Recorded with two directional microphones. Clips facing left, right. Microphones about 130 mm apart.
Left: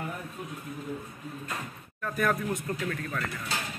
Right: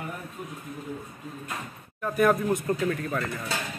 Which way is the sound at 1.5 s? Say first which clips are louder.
Right 1 dB; 15° right (ahead or behind).